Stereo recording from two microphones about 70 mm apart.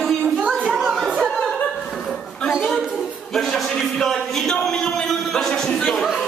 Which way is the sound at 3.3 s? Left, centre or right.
Centre.